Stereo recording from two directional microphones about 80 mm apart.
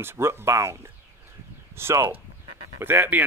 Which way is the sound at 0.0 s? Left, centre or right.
Right.